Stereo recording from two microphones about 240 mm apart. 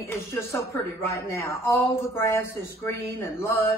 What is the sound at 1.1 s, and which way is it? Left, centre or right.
Speech, centre.